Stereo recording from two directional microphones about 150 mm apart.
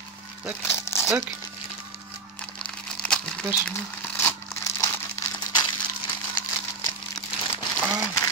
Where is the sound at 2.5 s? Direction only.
5° left (ahead or behind).